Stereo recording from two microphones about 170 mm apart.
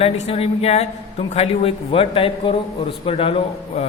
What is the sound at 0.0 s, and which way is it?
A man's voice, 35° left (ahead or behind).